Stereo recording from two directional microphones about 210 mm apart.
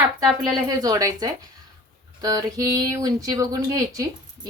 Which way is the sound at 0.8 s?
15° right (ahead or behind).